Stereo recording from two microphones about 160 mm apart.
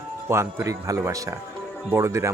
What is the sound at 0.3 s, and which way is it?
Speech, 15° right (ahead or behind).